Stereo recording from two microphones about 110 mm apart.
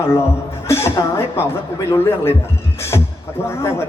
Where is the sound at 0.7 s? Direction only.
25° left (ahead or behind).